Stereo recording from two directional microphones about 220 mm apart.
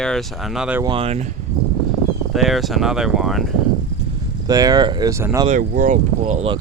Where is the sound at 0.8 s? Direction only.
25° right (ahead or behind).